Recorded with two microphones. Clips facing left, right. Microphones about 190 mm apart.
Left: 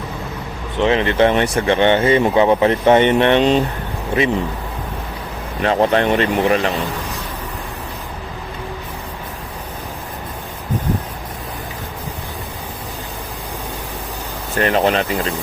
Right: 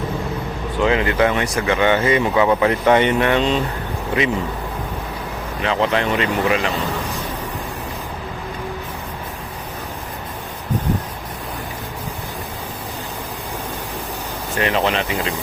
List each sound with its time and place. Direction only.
0.8 s speech: 25° left (ahead or behind)
5.6 s speech: 45° left (ahead or behind)
14.5 s speech: 45° left (ahead or behind)